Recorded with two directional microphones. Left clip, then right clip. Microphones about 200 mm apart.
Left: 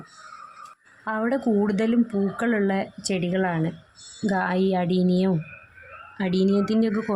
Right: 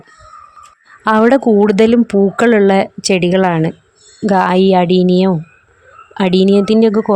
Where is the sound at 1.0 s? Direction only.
45° right (ahead or behind).